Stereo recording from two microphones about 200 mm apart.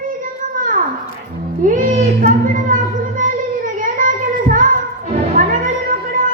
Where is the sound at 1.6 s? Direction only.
40° right (ahead or behind).